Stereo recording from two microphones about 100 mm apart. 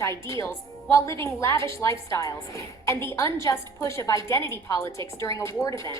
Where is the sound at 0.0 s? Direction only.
30° left (ahead or behind).